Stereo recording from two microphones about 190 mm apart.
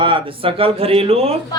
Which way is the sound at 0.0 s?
25° right (ahead or behind).